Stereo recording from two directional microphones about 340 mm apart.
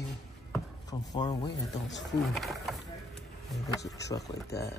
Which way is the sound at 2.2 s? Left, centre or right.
Centre.